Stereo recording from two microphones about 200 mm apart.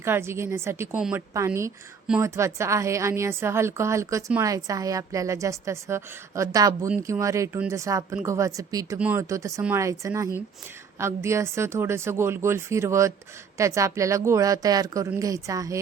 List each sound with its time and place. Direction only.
0.0 s a woman's voice: 10° right (ahead or behind)